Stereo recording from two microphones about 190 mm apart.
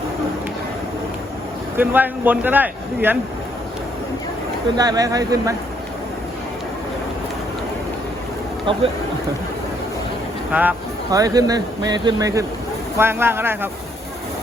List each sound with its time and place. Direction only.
1.7 s speech: 10° right (ahead or behind)
4.8 s speech: 20° right (ahead or behind)
10.5 s speech: 10° right (ahead or behind)